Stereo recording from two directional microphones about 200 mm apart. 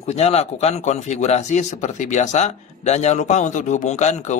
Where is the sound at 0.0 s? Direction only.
30° left (ahead or behind).